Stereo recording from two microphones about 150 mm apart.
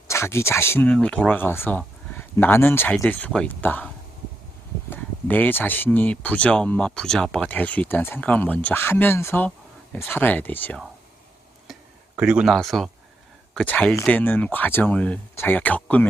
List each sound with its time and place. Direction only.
0.1 s speech: 20° left (ahead or behind)
4.9 s speech: 15° left (ahead or behind)
11.7 s a sound: 5° right (ahead or behind)
12.5 s speech: centre (ahead or behind)